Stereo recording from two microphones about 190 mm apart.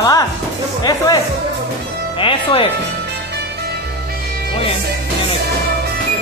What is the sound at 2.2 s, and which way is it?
Speech, 25° left (ahead or behind).